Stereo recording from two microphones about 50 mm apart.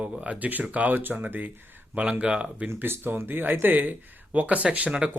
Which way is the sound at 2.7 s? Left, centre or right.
Right.